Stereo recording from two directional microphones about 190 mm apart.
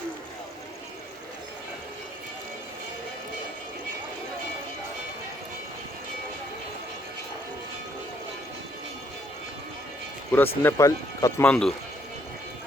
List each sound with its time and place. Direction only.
10.3 s speech: 10° left (ahead or behind)
11.4 s speech: 5° left (ahead or behind)